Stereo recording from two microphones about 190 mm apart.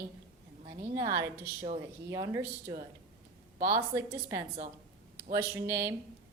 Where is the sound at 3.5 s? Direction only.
45° right (ahead or behind).